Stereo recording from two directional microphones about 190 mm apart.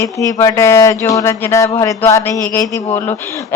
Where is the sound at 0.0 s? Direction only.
15° left (ahead or behind).